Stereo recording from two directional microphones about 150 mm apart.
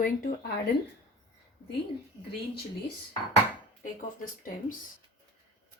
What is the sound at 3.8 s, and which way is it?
Speech, 60° left (ahead or behind).